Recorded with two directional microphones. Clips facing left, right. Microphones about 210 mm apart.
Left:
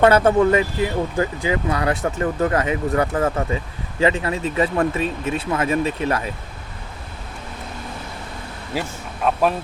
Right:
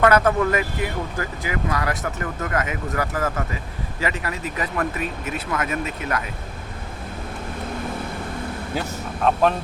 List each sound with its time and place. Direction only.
0.0 s speech: 30° left (ahead or behind)
8.7 s speech: 5° left (ahead or behind)